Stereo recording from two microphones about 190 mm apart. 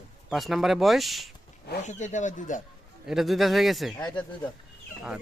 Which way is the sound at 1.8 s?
40° left (ahead or behind).